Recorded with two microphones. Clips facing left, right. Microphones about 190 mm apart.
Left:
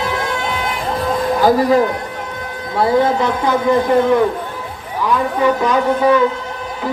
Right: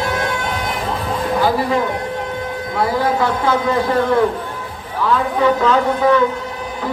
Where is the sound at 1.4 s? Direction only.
40° left (ahead or behind).